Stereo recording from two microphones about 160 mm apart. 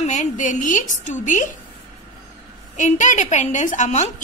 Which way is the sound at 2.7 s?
50° left (ahead or behind).